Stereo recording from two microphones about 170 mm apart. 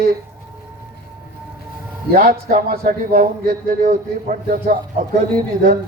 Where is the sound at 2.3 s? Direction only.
60° right (ahead or behind).